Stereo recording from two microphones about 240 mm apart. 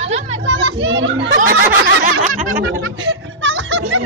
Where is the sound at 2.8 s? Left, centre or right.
Right.